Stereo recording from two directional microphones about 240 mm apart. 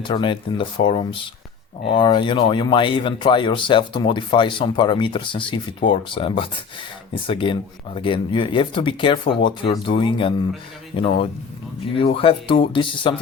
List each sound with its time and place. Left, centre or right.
0.0 s speech: centre